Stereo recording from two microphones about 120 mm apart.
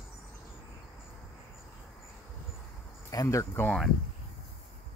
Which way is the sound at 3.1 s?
30° left (ahead or behind).